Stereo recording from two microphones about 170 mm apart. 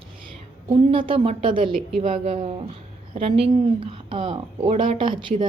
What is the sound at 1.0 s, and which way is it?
A woman's voice, 30° right (ahead or behind).